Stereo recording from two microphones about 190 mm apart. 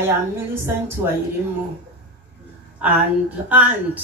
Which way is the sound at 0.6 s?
10° right (ahead or behind).